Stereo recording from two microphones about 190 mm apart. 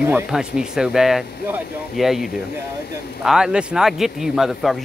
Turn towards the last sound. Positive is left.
turn(degrees=0)  # may be behind; listen again after turning